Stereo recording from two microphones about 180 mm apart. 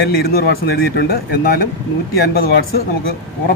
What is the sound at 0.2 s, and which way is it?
A man's voice, 60° left (ahead or behind).